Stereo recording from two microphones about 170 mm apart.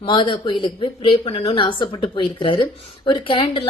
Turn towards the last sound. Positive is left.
turn(degrees=30)  # may be behind; listen again after turning